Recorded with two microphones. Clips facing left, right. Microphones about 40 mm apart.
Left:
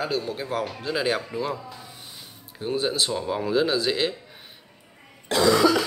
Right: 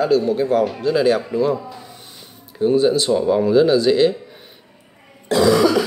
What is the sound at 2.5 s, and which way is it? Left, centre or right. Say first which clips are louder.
Speech: right 10 dB; centre.